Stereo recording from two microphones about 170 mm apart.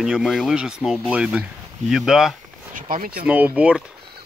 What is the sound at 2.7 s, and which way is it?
Speech, 55° right (ahead or behind).